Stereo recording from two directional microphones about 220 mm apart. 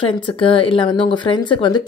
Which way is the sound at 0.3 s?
25° left (ahead or behind).